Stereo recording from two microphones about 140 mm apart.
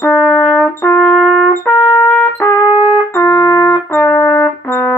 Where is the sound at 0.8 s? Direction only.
20° left (ahead or behind).